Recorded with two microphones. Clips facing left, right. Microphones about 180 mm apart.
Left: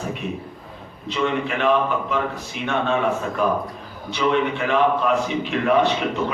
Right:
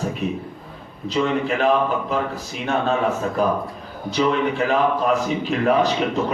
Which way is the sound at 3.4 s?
35° right (ahead or behind).